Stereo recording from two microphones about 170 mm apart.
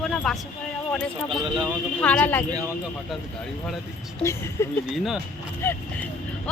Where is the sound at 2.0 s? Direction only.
10° left (ahead or behind).